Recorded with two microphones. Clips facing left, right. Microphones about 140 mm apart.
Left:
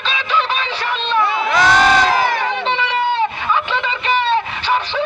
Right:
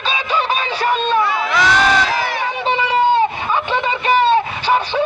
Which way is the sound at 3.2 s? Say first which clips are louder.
Right 1 dB; 45° right (ahead or behind).